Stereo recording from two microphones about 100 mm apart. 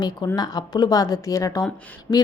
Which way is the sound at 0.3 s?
40° left (ahead or behind).